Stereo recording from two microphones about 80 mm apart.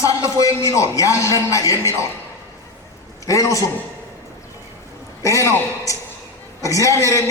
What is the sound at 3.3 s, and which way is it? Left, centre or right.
Speech, left.